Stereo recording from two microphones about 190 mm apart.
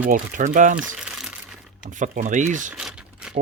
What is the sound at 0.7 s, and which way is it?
Crumpling, 5° right (ahead or behind).